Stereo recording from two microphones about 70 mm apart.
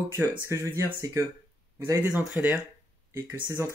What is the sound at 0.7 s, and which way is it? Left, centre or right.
Speech, right.